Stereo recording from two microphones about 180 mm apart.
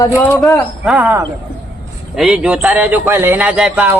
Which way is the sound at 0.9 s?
10° right (ahead or behind).